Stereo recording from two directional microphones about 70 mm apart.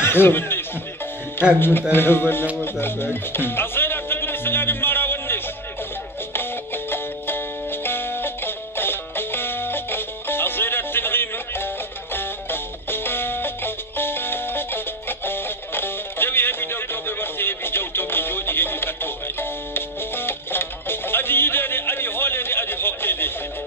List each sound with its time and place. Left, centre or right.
0.0 s chuckle: left
1.6 s speech: left
2.6 s music: left